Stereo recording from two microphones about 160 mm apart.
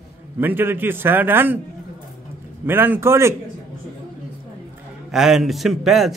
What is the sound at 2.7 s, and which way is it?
Speech, 15° right (ahead or behind).